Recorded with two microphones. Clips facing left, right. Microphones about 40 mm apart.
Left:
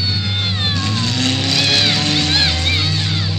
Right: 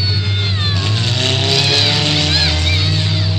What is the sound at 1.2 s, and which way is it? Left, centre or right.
Vehicle, right.